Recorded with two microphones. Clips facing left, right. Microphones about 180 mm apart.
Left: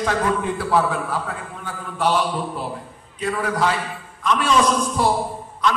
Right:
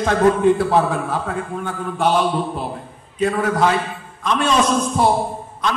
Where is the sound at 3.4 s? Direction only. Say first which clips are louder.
Right 4 dB; 25° right (ahead or behind).